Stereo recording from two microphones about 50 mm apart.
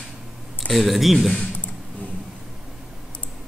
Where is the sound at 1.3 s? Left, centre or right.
Left.